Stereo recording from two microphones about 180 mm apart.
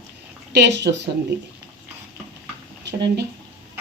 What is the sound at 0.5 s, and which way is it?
Speech, 70° right (ahead or behind).